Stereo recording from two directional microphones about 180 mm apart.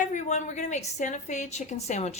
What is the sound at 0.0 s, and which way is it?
A woman's voice, 40° left (ahead or behind).